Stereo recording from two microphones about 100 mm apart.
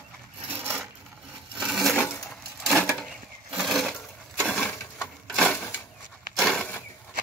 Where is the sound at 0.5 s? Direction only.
20° right (ahead or behind).